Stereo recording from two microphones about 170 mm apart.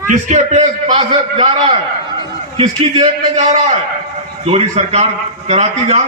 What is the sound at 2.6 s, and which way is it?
A man's voice, 35° right (ahead or behind).